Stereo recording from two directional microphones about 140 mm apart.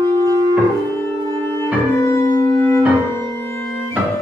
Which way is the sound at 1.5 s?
20° left (ahead or behind).